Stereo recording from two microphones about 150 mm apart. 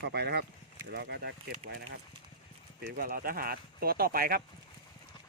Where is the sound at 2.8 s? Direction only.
70° right (ahead or behind).